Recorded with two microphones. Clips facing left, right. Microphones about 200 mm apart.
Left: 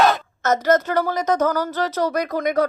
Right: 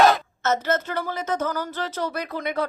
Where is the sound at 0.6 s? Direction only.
40° left (ahead or behind).